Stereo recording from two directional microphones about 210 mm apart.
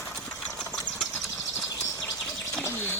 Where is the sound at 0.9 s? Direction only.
Centre (ahead or behind).